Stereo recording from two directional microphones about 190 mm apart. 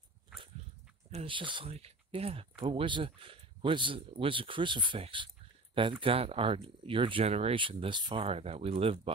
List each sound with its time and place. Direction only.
1.1 s speech: 25° right (ahead or behind)